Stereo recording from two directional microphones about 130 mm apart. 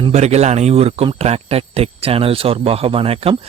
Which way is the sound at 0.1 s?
60° right (ahead or behind).